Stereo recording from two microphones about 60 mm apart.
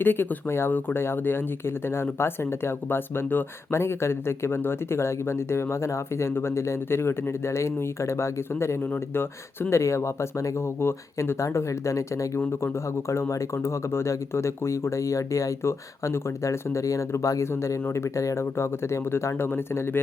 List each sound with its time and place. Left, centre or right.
0.0 s speech: left
12.5 s speech: left